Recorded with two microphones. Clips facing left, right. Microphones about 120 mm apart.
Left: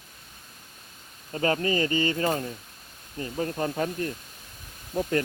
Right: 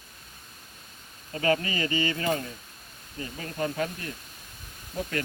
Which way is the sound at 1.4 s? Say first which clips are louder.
Left 2 dB; 35° left (ahead or behind).